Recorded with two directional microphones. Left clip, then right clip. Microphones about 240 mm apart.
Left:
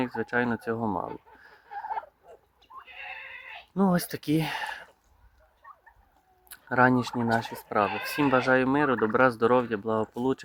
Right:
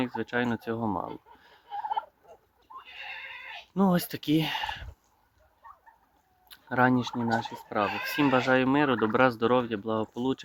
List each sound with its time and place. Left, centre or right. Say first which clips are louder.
0.0 s speech: left 2 dB; centre
1.4 s fowl: right 2 dB; centre
2.8 s neigh: even; right
3.8 s speech: even; centre
6.5 s turkey: left 2 dB; centre
7.3 s speech: left 3 dB; centre